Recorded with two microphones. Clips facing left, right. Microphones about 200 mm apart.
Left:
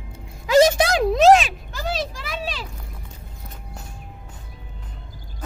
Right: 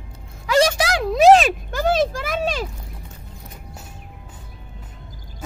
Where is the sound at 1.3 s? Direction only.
45° right (ahead or behind).